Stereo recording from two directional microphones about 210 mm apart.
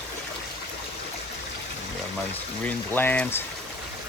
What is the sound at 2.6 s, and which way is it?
Speech, 10° left (ahead or behind).